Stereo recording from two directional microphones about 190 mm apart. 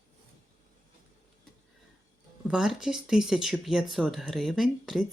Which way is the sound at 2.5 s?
5° right (ahead or behind).